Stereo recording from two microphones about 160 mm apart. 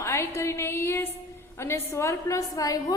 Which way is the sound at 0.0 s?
15° left (ahead or behind).